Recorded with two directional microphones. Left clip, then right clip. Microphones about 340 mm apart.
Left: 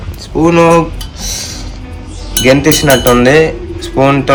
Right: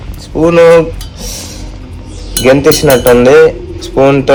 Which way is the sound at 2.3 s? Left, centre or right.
Centre.